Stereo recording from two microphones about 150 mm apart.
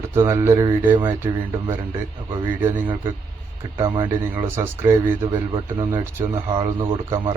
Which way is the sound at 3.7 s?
35° right (ahead or behind).